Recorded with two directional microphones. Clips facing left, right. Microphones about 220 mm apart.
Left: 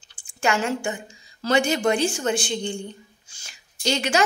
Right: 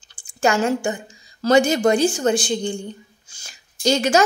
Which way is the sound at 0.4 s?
40° right (ahead or behind).